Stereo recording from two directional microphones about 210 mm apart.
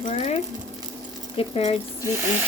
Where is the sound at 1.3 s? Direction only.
25° left (ahead or behind).